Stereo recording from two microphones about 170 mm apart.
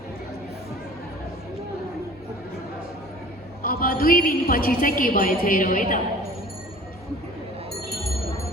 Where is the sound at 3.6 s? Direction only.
60° left (ahead or behind).